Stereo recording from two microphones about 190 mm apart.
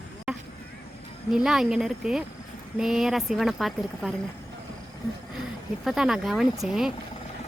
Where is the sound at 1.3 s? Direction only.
5° right (ahead or behind).